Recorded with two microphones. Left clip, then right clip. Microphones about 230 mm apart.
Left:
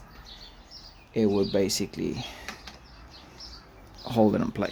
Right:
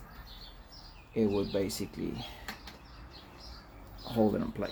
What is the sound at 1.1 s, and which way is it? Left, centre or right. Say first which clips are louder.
Speech: left 6 dB; left.